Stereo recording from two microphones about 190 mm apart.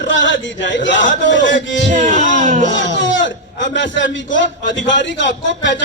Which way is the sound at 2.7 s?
70° left (ahead or behind).